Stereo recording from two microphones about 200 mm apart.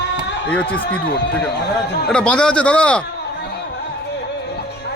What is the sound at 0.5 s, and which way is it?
Speech, 5° left (ahead or behind).